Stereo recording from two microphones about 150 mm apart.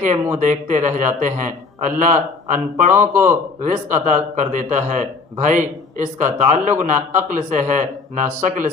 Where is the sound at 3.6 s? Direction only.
55° right (ahead or behind).